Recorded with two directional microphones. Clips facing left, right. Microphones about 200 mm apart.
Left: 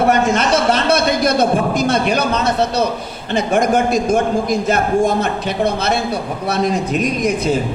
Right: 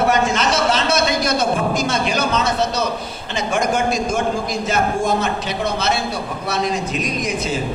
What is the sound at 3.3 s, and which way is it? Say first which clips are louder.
A man's voice: left 5 dB; 55° left (ahead or behind).